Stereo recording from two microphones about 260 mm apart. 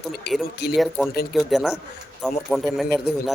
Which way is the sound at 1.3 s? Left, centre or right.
Centre.